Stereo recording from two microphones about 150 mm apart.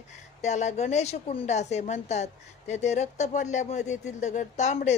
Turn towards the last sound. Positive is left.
turn(degrees=50)  # may be behind; listen again after turning